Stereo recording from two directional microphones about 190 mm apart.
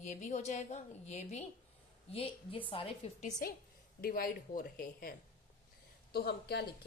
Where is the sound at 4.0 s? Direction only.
50° left (ahead or behind).